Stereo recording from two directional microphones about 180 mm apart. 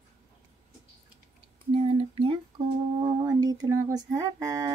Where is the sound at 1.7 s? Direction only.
30° right (ahead or behind).